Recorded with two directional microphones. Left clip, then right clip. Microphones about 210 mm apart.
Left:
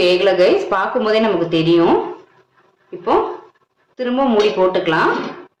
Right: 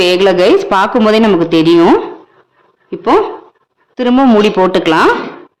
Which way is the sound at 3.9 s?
55° right (ahead or behind).